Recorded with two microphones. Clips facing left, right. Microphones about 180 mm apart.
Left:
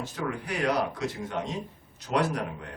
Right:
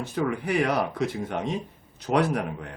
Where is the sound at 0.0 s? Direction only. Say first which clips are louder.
Right 6 dB; 60° right (ahead or behind).